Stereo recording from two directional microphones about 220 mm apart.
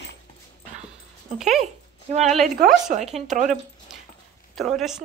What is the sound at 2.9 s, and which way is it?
Speech, 30° right (ahead or behind).